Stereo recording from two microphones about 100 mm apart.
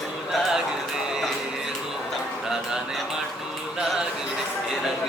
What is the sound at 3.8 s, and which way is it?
Music, 5° right (ahead or behind).